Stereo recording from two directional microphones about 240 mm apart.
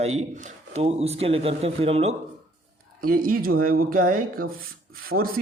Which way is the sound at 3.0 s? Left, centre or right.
Right.